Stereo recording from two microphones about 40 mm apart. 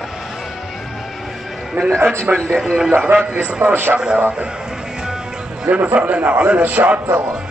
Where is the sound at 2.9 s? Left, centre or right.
Right.